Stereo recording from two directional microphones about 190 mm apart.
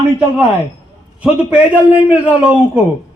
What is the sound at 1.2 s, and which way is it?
A man's voice, 5° right (ahead or behind).